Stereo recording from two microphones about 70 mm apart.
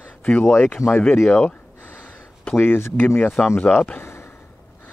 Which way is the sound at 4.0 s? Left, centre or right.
Left.